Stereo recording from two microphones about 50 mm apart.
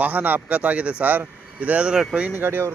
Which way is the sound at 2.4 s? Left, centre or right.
Right.